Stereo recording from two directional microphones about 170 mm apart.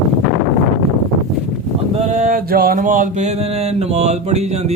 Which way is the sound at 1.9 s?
45° right (ahead or behind).